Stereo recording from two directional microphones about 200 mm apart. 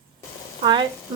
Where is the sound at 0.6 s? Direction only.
20° right (ahead or behind).